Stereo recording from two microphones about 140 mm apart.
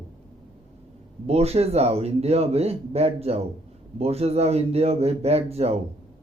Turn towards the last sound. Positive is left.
turn(degrees=-45)  # may be behind; listen again after turning